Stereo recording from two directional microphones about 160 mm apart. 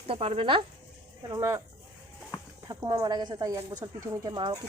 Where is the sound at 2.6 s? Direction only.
25° right (ahead or behind).